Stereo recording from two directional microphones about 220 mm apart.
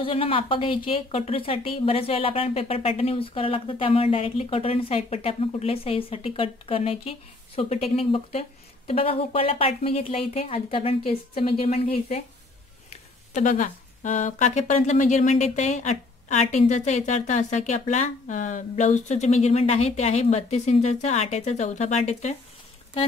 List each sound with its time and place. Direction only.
0.0 s speech: 25° left (ahead or behind)